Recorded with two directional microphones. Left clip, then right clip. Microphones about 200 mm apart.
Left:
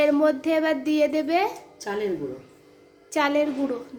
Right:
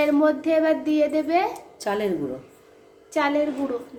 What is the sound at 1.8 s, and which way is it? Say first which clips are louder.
Speech: right 3 dB; 50° right (ahead or behind).